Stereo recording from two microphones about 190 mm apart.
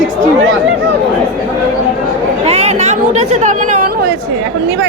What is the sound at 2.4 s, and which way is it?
Speech, 35° right (ahead or behind).